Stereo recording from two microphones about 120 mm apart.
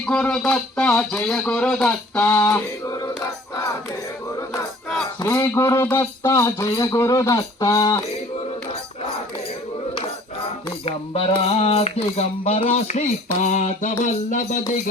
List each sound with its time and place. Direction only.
0.0 s speech: 5° left (ahead or behind)
2.1 s speech: 15° left (ahead or behind)
5.2 s speech: 20° left (ahead or behind)
10.4 s a sound: 55° left (ahead or behind); by 13.1 s 70° left (ahead or behind)
13.4 s mantra: 80° left
14.0 s music: 90° left